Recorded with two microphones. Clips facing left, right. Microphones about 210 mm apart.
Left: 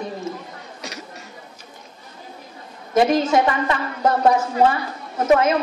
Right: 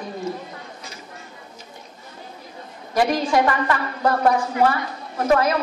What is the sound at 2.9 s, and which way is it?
A woman's voice, 25° left (ahead or behind).